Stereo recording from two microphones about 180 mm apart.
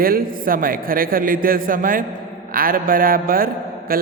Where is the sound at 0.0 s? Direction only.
50° right (ahead or behind).